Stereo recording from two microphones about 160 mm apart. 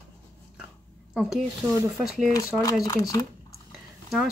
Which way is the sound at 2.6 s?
20° left (ahead or behind).